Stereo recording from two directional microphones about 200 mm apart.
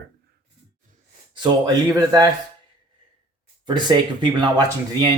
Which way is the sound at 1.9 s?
20° right (ahead or behind).